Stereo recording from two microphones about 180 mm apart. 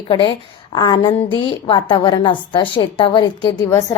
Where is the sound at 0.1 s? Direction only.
30° left (ahead or behind).